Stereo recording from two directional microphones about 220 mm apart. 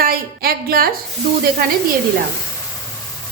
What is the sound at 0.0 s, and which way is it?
Speech, 45° right (ahead or behind).